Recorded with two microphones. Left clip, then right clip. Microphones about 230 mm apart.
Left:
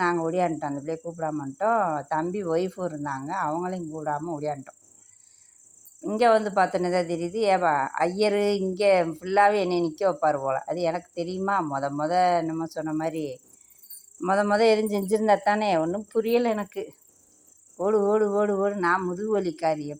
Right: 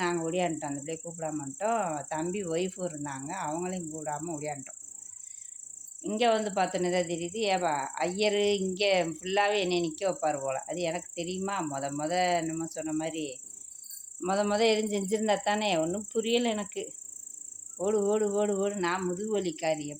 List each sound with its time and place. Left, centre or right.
0.0 s speech: centre
6.0 s speech: centre